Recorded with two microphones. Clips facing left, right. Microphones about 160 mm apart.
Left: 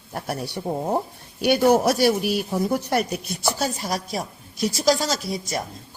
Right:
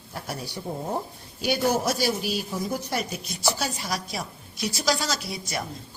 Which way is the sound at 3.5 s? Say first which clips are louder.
Left 4 dB; 45° left (ahead or behind).